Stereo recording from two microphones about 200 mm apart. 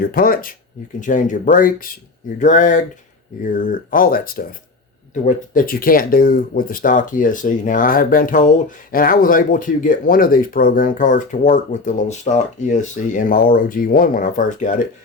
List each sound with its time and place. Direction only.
0.0 s speech: 45° left (ahead or behind)